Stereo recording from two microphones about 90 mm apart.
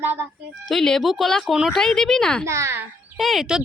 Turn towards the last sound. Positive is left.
turn(degrees=-5)  # may be behind; listen again after turning